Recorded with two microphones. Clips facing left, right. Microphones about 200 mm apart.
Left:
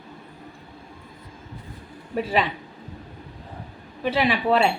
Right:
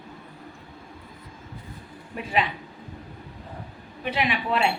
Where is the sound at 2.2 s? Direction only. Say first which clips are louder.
Left 3 dB; 35° left (ahead or behind).